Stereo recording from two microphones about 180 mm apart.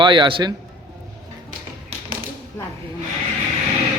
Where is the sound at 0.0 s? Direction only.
25° right (ahead or behind).